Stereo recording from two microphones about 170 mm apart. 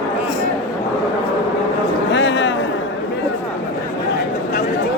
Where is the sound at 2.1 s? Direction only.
90° left.